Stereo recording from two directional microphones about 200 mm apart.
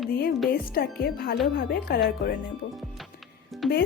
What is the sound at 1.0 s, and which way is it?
A woman's voice, 45° left (ahead or behind).